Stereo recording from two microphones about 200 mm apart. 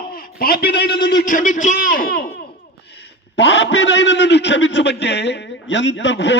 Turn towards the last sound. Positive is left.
turn(degrees=60)  # may be behind; listen again after turning